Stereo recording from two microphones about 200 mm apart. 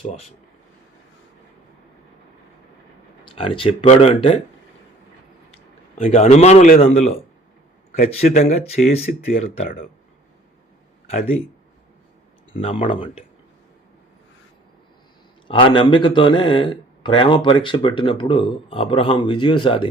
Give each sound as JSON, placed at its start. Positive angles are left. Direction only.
{"t": 3.2, "sound": "speech", "side_deg": 25}
{"t": 6.0, "sound": "speech", "side_deg": 35}
{"t": 11.0, "sound": "a sound", "side_deg": 30}
{"t": 12.5, "sound": "speech", "side_deg": 30}
{"t": 15.4, "sound": "speech", "side_deg": 25}